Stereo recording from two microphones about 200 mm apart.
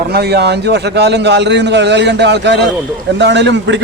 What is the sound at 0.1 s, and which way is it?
A man's voice, 55° right (ahead or behind).